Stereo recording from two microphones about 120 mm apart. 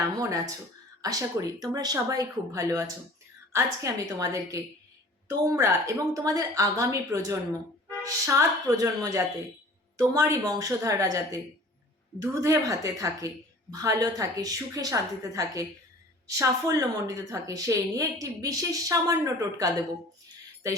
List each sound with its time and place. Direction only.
0.2 s a woman's voice: 30° right (ahead or behind)